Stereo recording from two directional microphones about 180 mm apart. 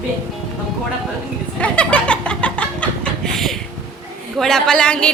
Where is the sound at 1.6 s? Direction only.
5° left (ahead or behind).